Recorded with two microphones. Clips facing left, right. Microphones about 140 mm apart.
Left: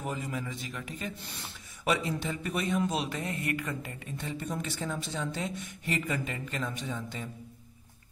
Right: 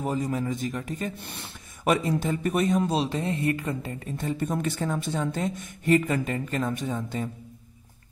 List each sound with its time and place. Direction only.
0.0 s a man's voice: 35° right (ahead or behind)
4.2 s speech: 50° right (ahead or behind)